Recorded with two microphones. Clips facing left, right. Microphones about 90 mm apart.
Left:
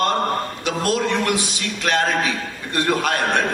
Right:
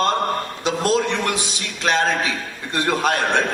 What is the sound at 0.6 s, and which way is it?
A man's voice, 20° right (ahead or behind).